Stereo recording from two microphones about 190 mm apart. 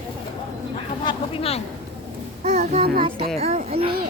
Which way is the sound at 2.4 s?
40° right (ahead or behind).